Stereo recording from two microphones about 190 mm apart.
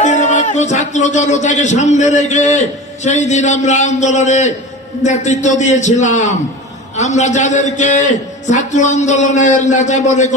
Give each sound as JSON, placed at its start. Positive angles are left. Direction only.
{"t": 0.0, "sound": "a man's voice", "side_deg": 40}